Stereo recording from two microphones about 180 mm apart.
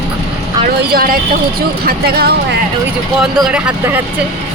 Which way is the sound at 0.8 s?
55° right (ahead or behind).